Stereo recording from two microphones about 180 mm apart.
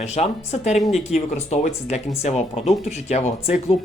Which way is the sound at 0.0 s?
35° left (ahead or behind).